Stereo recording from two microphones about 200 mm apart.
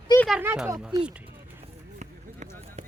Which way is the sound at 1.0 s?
10° right (ahead or behind).